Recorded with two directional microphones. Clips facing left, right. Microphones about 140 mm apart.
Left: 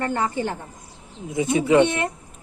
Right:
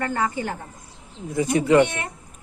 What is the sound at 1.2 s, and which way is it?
Speech, 15° left (ahead or behind).